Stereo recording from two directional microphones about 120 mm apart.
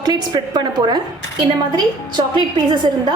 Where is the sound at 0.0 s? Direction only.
35° right (ahead or behind).